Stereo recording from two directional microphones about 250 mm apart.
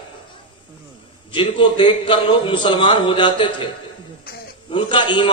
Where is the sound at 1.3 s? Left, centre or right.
Centre.